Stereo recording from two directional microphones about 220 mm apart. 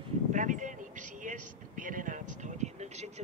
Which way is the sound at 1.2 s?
35° right (ahead or behind).